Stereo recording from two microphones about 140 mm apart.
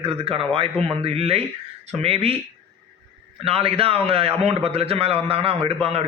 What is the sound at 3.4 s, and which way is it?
A man's voice, 45° right (ahead or behind).